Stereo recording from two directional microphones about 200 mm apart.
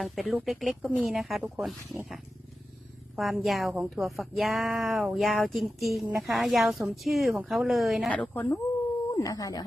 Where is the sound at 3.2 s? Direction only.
Centre (ahead or behind).